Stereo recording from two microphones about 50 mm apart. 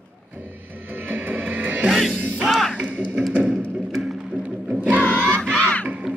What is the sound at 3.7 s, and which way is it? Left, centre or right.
Music, centre.